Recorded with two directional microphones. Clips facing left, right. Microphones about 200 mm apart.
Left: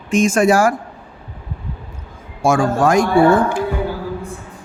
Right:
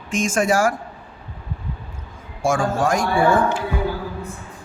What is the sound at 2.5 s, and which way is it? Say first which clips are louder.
Speech: left 5 dB; 60° left (ahead or behind).